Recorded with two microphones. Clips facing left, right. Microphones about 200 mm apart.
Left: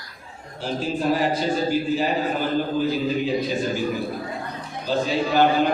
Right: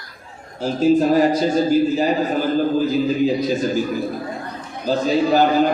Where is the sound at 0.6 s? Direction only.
40° right (ahead or behind).